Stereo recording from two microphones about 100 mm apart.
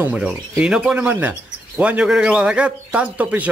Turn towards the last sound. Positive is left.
turn(degrees=-15)  # may be behind; listen again after turning